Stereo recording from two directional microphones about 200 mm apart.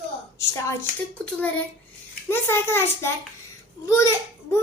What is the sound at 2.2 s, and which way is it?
A child's voice, 10° left (ahead or behind).